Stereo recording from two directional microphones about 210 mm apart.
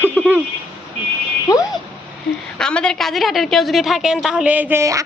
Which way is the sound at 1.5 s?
15° left (ahead or behind).